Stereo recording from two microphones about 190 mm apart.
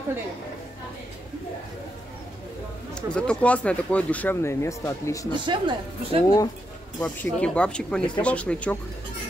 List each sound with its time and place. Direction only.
2.9 s speech: 5° left (ahead or behind)
5.3 s speech: 25° right (ahead or behind)
7.0 s speech: 5° left (ahead or behind)